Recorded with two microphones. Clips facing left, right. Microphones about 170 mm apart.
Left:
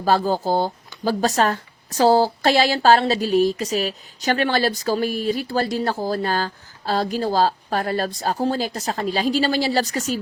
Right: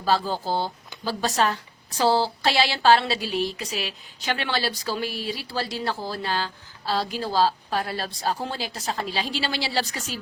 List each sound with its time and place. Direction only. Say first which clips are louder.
0.0 s speech: left 5 dB; 45° left (ahead or behind)